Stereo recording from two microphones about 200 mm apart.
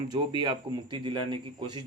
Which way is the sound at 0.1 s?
20° right (ahead or behind).